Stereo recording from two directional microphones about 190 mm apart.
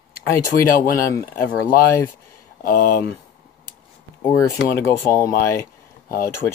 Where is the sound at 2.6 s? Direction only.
45° left (ahead or behind).